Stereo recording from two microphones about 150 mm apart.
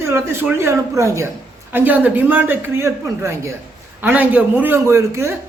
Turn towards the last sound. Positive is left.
turn(degrees=-20)  # may be behind; listen again after turning